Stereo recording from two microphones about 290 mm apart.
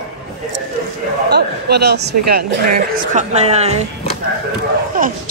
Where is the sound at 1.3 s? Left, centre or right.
Right.